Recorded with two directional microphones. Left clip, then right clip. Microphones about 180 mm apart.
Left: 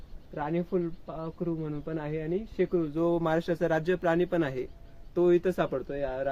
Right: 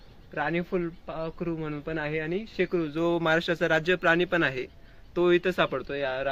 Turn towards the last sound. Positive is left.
turn(degrees=15)  # may be behind; listen again after turning